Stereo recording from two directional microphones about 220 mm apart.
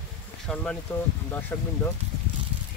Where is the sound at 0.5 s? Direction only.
Centre (ahead or behind).